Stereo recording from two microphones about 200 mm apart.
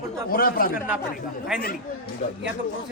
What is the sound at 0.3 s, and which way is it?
Speech, 45° left (ahead or behind).